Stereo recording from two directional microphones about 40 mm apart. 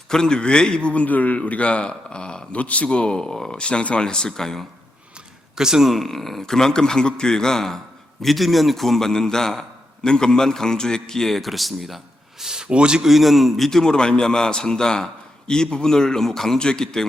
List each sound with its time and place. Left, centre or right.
0.1 s speech: centre
1.0 s speech: left
2.6 s speech: left; by 4.6 s centre
5.5 s speech: centre
5.9 s a man's voice: centre
8.2 s a man's voice: centre
12.4 s a man's voice: centre
13.1 s a man's voice: centre
13.7 s a man's voice: centre